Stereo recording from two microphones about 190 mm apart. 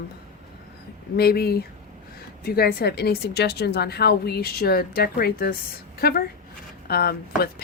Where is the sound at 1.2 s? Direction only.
55° left (ahead or behind).